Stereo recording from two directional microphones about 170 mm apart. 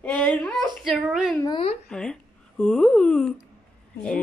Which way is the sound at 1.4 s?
30° left (ahead or behind).